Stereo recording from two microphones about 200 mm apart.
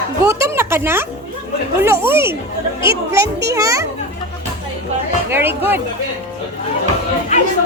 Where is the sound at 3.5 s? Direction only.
15° right (ahead or behind).